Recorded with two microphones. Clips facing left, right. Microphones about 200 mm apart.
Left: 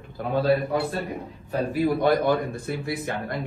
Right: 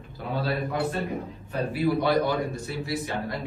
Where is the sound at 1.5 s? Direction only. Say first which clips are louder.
Left 2 dB; 45° left (ahead or behind).